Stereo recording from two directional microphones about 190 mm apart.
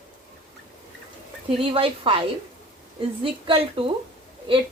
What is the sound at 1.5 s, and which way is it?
Speech, 30° right (ahead or behind).